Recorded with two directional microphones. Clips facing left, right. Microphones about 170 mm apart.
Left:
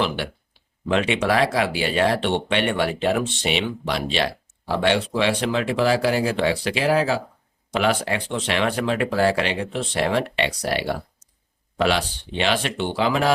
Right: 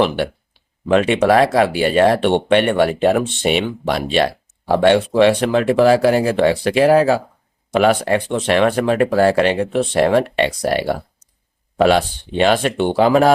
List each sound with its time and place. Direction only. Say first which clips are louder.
0.9 s speech: right 7 dB; 50° right (ahead or behind)